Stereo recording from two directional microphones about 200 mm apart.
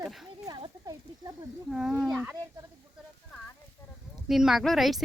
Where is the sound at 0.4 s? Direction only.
20° right (ahead or behind).